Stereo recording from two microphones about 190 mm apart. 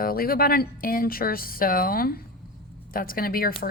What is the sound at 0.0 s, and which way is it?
A woman's voice, 50° left (ahead or behind).